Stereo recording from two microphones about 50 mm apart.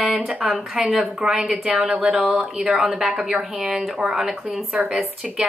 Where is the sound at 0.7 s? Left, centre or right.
Centre.